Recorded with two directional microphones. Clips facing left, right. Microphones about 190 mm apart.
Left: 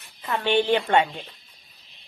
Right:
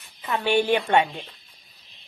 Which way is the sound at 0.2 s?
10° right (ahead or behind).